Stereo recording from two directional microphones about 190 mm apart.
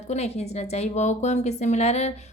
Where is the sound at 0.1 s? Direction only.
35° left (ahead or behind).